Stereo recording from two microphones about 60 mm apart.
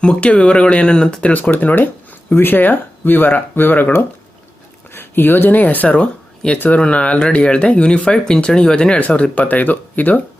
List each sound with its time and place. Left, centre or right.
0.0 s speech: centre